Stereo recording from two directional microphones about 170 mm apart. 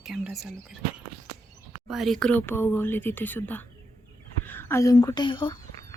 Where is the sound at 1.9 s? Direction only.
Centre (ahead or behind); by 5.6 s 30° left (ahead or behind).